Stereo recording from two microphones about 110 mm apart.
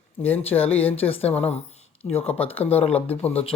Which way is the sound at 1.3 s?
70° left (ahead or behind).